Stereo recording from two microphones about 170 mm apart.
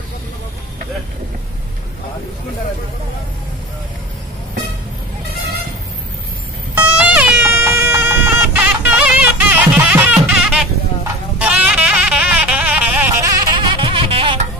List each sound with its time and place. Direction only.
6.7 s music: 10° right (ahead or behind)
11.3 s goat: 5° right (ahead or behind)
13.2 s goat: 25° right (ahead or behind)